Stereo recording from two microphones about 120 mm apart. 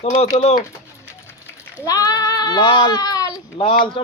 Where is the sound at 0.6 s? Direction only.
20° left (ahead or behind).